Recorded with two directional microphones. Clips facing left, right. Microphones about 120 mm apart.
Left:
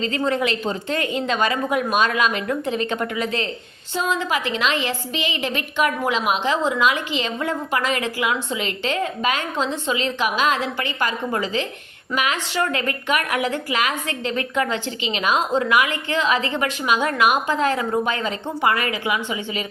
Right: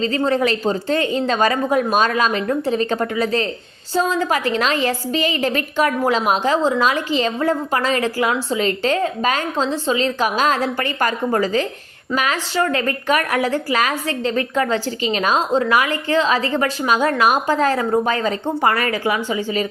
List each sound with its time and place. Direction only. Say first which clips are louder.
0.0 s a woman's voice: right 4 dB; 35° right (ahead or behind)